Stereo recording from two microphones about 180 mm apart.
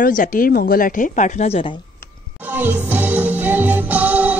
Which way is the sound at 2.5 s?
10° right (ahead or behind).